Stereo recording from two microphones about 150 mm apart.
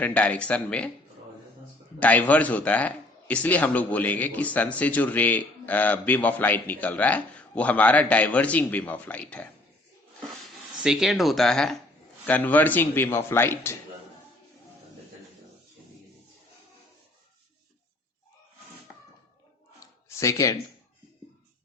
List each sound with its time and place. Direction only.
0.0 s a man's voice: 10° left (ahead or behind)
2.0 s a man's voice: 10° left (ahead or behind)
10.8 s a man's voice: centre (ahead or behind); by 13.7 s 15° left (ahead or behind)
20.1 s speech: 20° left (ahead or behind)